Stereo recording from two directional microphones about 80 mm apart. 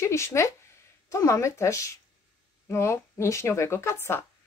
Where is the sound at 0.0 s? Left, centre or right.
Left.